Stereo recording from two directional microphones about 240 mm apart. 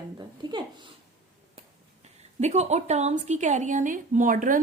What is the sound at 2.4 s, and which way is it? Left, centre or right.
A woman's voice, right.